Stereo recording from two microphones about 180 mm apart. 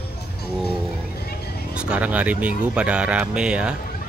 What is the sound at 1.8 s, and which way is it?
Speech, 5° right (ahead or behind).